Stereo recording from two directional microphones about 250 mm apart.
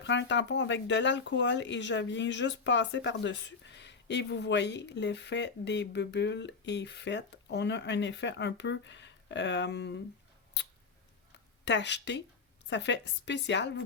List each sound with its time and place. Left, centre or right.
0.0 s speech: left
11.6 s speech: left